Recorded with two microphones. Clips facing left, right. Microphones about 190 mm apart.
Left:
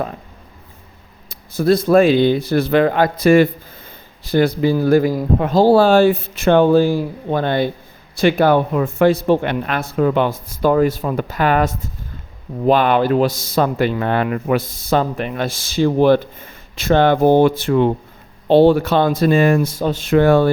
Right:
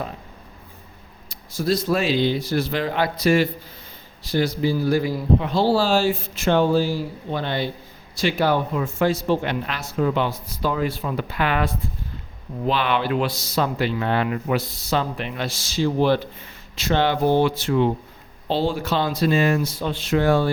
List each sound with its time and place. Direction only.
1.5 s speech: 55° left (ahead or behind)